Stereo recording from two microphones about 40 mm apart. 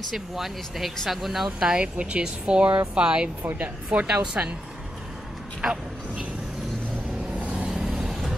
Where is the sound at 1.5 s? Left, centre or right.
Right.